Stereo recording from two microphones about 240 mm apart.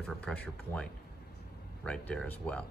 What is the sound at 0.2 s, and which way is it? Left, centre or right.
Speech, centre.